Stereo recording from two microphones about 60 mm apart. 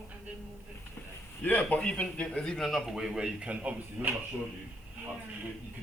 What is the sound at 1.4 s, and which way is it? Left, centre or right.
A man's voice, left.